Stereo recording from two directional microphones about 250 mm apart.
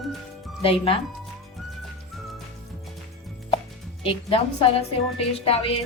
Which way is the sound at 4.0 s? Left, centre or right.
Left.